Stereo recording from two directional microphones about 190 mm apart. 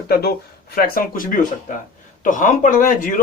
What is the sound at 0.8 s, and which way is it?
Speech, 50° left (ahead or behind).